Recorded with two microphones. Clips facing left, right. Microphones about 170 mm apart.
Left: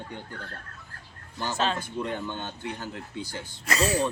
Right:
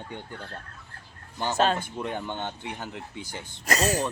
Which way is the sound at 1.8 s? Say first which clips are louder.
Left 1 dB; 20° right (ahead or behind).